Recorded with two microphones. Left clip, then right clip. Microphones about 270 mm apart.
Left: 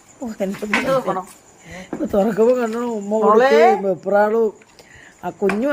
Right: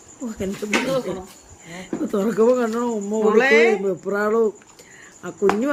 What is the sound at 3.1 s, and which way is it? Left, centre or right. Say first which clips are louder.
Speech: left 4 dB; centre.